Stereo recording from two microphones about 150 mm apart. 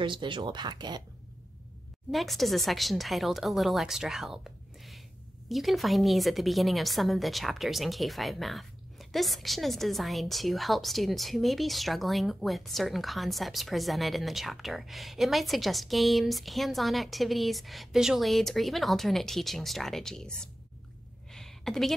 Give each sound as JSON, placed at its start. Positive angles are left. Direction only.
{"t": 0.0, "sound": "speech", "side_deg": -30}
{"t": 2.0, "sound": "a woman's voice", "side_deg": 0}
{"t": 5.5, "sound": "a woman's voice", "side_deg": 0}
{"t": 21.3, "sound": "a sound", "side_deg": 0}